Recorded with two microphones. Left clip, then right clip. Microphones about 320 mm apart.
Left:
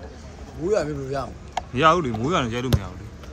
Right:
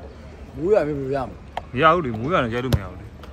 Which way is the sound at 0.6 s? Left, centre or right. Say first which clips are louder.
Right 4 dB; right.